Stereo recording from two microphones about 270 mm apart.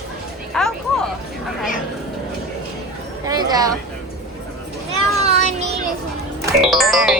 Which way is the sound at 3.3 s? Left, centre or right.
Centre.